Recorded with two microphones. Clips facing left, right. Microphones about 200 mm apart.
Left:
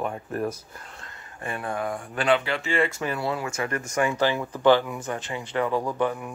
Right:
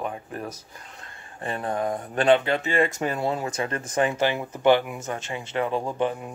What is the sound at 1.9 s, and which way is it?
Speech, 20° right (ahead or behind).